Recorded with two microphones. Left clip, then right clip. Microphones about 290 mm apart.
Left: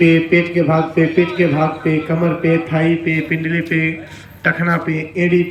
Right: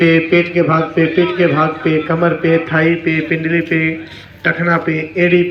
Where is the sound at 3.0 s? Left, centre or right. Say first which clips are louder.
Right 3 dB; centre.